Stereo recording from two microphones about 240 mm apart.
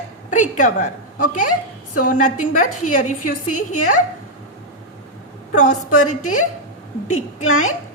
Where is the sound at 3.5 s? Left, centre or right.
Left.